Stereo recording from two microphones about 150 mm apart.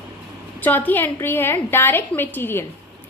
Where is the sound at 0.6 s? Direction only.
10° left (ahead or behind).